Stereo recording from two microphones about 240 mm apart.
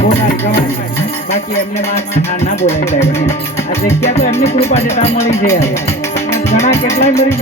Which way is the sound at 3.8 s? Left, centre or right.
Left.